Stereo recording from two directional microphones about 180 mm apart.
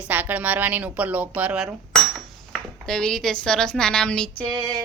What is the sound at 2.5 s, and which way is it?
Speech, 5° left (ahead or behind).